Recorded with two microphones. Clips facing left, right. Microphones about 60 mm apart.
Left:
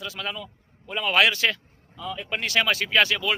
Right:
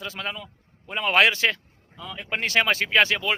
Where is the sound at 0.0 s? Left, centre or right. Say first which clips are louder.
Even; right.